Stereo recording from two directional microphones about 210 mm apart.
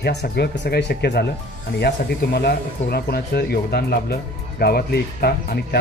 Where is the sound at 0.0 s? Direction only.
50° left (ahead or behind).